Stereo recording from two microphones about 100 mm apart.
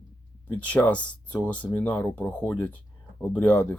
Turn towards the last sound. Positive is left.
turn(degrees=15)  # may be behind; listen again after turning